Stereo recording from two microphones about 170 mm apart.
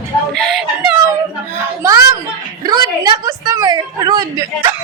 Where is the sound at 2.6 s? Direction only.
20° right (ahead or behind).